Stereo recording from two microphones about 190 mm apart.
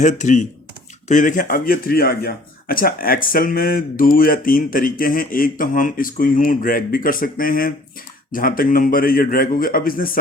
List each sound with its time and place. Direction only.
0.0 s speech: 40° left (ahead or behind)